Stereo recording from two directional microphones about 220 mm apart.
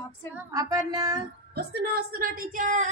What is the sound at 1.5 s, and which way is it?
A woman's voice, 45° right (ahead or behind).